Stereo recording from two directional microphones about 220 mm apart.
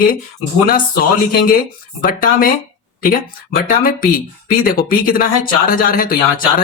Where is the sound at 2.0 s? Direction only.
40° left (ahead or behind).